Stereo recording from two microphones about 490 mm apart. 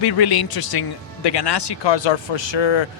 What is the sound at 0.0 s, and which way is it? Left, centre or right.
Speech, left.